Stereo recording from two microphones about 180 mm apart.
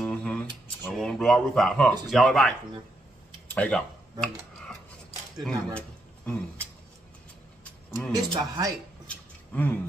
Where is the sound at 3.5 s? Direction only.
5° left (ahead or behind).